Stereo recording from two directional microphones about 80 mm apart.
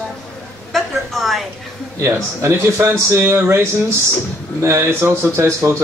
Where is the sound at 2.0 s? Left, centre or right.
Right.